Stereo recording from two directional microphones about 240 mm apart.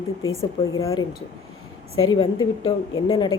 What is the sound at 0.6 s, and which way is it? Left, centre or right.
Speech, centre.